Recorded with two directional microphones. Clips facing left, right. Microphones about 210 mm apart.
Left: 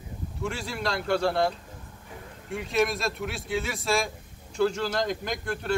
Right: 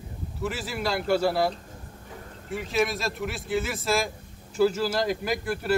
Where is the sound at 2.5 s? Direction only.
Centre (ahead or behind).